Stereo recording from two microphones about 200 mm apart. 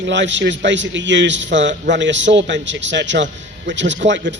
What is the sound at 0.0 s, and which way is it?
A man's voice, 65° right (ahead or behind).